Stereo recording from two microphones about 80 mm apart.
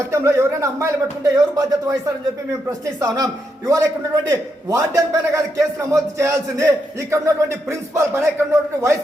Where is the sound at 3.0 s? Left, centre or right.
Right.